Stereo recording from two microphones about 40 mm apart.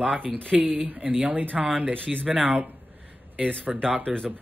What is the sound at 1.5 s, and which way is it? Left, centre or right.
Speech, centre.